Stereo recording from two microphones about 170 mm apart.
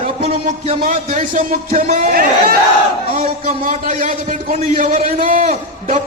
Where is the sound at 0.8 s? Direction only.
50° right (ahead or behind).